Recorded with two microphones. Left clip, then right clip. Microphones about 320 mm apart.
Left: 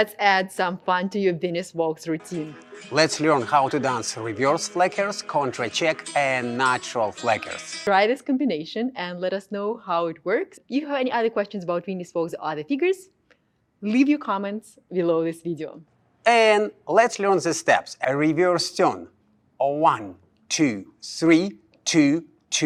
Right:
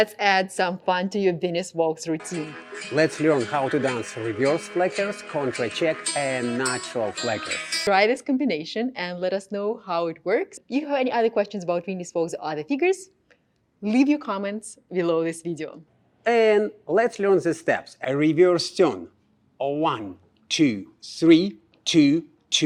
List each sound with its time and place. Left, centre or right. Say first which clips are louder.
0.0 s speech: even; centre
2.9 s speech: left 1 dB; left
7.4 s speech: right 2 dB; centre
16.2 s speech: left 2 dB; left